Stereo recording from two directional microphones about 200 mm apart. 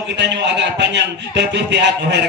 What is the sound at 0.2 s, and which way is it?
A man's voice, 60° right (ahead or behind).